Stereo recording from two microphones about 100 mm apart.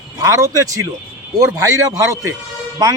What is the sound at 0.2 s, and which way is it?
A man's voice, 30° right (ahead or behind).